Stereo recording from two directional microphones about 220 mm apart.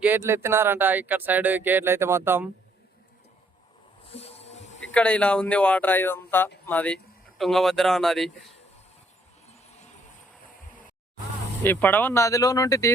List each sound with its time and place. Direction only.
0.0 s speech: 10° right (ahead or behind)
4.0 s a sound: 25° left (ahead or behind)
4.9 s speech: 5° left (ahead or behind)
11.6 s speech: 10° left (ahead or behind)